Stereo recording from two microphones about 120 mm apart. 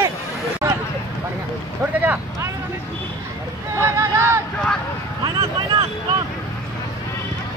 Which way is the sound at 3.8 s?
25° right (ahead or behind).